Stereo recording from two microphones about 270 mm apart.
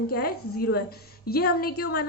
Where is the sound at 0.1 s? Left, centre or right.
Left.